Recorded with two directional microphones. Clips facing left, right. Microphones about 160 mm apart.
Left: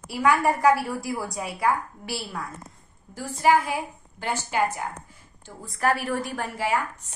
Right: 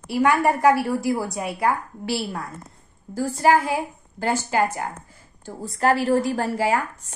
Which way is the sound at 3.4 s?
35° right (ahead or behind).